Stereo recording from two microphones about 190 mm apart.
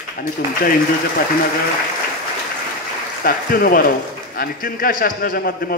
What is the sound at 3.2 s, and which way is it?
A man's voice, 50° left (ahead or behind).